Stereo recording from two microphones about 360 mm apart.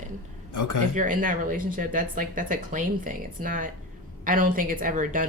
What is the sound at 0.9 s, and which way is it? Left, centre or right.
Speech, right.